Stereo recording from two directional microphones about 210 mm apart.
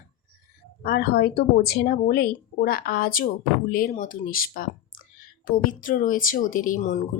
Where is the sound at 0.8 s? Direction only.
45° left (ahead or behind).